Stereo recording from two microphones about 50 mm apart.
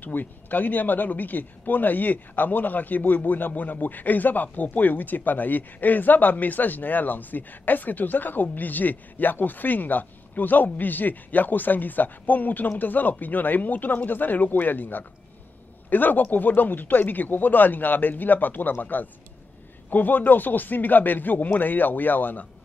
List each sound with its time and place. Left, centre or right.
0.0 s speech: left